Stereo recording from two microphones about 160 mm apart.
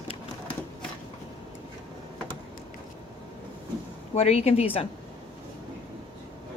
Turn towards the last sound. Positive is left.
turn(degrees=35)  # may be behind; listen again after turning